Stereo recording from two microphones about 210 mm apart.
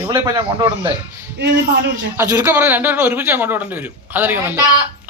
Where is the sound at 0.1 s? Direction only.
20° right (ahead or behind).